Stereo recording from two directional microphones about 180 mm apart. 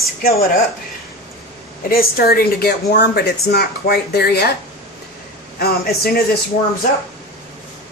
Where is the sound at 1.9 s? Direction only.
55° left (ahead or behind).